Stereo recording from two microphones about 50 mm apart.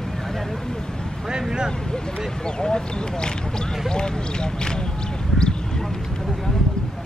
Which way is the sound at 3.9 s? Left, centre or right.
Centre.